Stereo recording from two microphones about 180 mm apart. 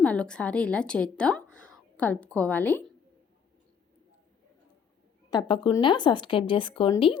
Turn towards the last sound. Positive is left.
turn(degrees=30)  # may be behind; listen again after turning